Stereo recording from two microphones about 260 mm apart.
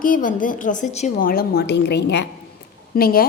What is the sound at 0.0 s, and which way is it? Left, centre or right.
A woman's voice, left.